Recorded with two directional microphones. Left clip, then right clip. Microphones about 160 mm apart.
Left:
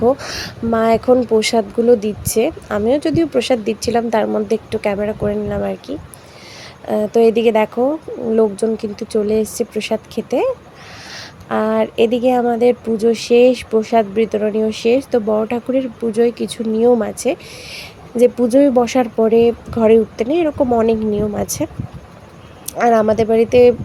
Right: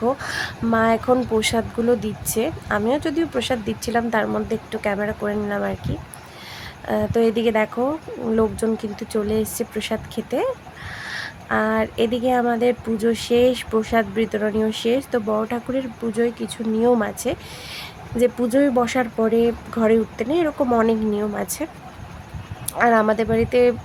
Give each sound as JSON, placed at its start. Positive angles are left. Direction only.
{"t": 0.0, "sound": "a woman's voice", "side_deg": 10}
{"t": 8.8, "sound": "a woman's voice", "side_deg": 10}
{"t": 22.8, "sound": "a woman's voice", "side_deg": 15}